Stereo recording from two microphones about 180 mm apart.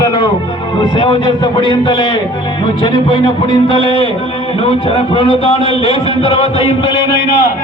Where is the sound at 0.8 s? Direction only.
30° left (ahead or behind).